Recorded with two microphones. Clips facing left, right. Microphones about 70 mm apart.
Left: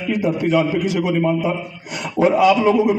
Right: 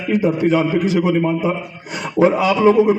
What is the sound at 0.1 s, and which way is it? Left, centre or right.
A man's voice, right.